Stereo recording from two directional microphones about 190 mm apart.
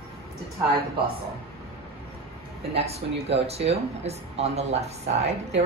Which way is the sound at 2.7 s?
30° right (ahead or behind).